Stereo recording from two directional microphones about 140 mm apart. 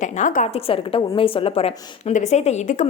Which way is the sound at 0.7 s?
40° left (ahead or behind).